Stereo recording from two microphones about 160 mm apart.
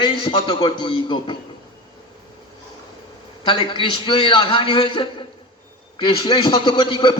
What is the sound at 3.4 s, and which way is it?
A man's voice, 30° left (ahead or behind).